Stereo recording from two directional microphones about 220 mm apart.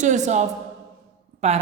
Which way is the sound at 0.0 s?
35° right (ahead or behind).